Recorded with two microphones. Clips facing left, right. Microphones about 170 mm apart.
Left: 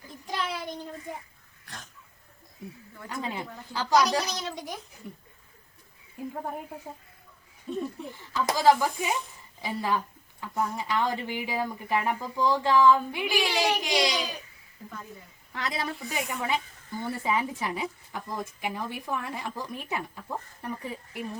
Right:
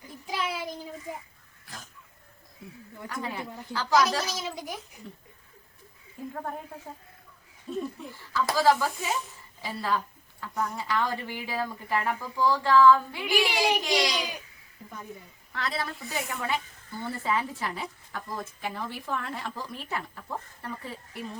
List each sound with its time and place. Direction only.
0.3 s child singing: 5° right (ahead or behind)
1.6 s wheeze: centre (ahead or behind)
3.1 s speech: 20° left (ahead or behind)
4.2 s a child's voice: centre (ahead or behind)
5.0 s speech: 10° left (ahead or behind)
7.7 s a child's voice: centre (ahead or behind)
8.1 s a woman's voice: 20° left (ahead or behind)
13.5 s a child's voice: 15° right (ahead or behind)
13.8 s speech: 20° left (ahead or behind)
15.5 s speech: 15° left (ahead or behind)